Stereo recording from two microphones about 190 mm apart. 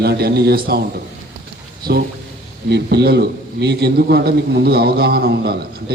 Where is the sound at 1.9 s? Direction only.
60° right (ahead or behind).